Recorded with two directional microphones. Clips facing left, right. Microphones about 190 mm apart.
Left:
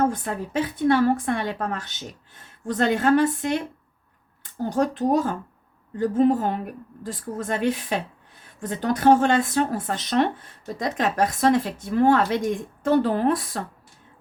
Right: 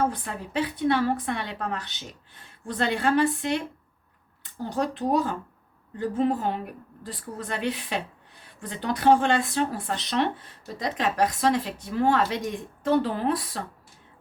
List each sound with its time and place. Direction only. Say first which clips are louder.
0.1 s speech: left 4 dB; 45° left (ahead or behind)
4.6 s speech: left 5 dB; 45° left (ahead or behind)